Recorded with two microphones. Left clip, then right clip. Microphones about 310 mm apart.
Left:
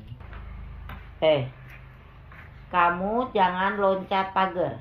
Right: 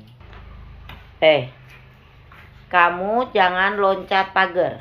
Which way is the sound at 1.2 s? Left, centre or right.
Centre.